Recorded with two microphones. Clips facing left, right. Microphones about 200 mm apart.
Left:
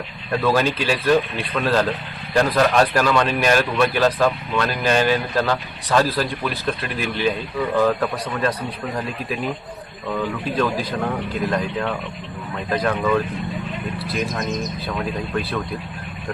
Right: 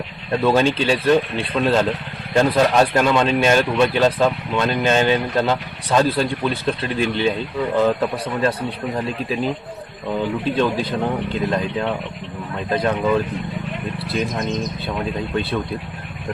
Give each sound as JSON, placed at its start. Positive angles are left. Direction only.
{"t": 0.4, "sound": "speech", "side_deg": -25}